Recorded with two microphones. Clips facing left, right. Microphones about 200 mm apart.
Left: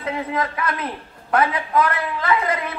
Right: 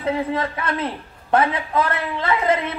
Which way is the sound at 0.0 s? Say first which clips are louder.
Right 2 dB; 30° right (ahead or behind).